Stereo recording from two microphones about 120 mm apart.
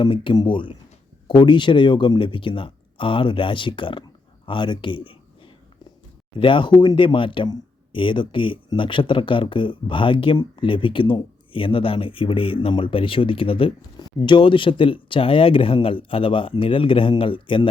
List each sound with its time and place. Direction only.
0.0 s speech: 40° left (ahead or behind)
4.4 s a sound: 40° left (ahead or behind)
6.4 s speech: 45° left (ahead or behind)